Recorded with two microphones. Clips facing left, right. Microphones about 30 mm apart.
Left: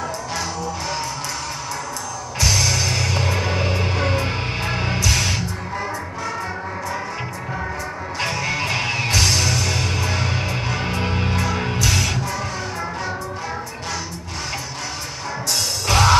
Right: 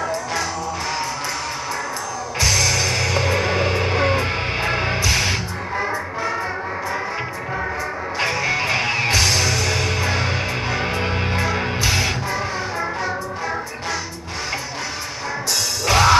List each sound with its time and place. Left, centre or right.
2.4 s music: centre
8.2 s music: centre
15.9 s music: centre